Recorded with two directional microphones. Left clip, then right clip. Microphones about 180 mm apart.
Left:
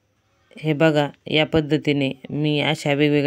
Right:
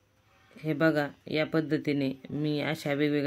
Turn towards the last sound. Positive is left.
turn(degrees=45)  # may be behind; listen again after turning